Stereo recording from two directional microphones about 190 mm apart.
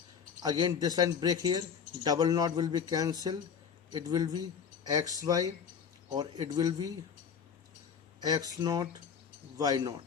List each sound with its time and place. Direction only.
0.4 s speech: 20° right (ahead or behind)
8.2 s speech: 20° right (ahead or behind)